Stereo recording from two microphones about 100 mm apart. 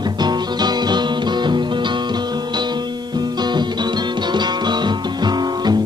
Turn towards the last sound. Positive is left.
turn(degrees=-45)  # may be behind; listen again after turning